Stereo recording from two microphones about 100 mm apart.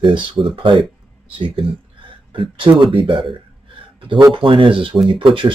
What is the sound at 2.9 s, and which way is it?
Speech, 70° right (ahead or behind).